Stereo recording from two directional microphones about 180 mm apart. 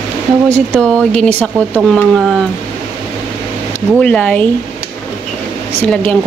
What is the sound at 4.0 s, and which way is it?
Speech, 5° left (ahead or behind).